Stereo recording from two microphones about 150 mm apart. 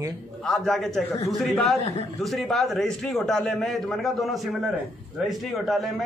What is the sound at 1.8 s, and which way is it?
Speech, 45° left (ahead or behind).